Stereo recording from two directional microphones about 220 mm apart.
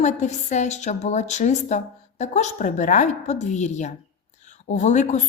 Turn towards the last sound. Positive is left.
turn(degrees=35)  # may be behind; listen again after turning